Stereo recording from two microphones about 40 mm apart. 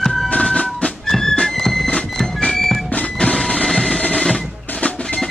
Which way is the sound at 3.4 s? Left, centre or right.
Centre.